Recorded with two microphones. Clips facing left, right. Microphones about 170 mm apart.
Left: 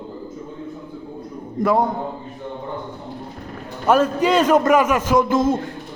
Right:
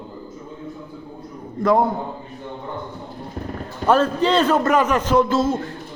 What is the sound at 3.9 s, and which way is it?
A man's voice, 10° left (ahead or behind).